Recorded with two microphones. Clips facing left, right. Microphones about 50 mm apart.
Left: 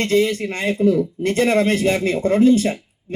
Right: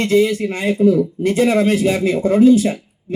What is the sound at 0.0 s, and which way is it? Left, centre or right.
Speech, left.